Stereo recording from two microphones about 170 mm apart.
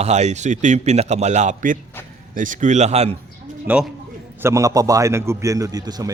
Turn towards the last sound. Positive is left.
turn(degrees=-20)  # may be behind; listen again after turning